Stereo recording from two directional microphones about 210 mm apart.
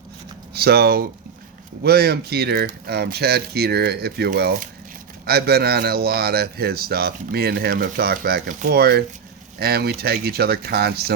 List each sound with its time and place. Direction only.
0.5 s speech: 45° right (ahead or behind)